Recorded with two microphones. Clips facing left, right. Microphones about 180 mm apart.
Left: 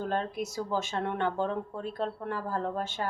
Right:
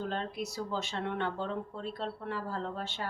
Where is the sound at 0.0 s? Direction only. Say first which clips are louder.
Left 4 dB; 45° left (ahead or behind).